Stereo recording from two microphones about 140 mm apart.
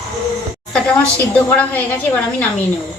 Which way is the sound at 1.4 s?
10° left (ahead or behind).